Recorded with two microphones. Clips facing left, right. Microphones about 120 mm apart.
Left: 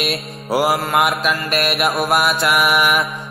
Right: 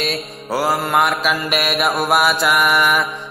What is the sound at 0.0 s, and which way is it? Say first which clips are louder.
Mantra: even; 10° left (ahead or behind).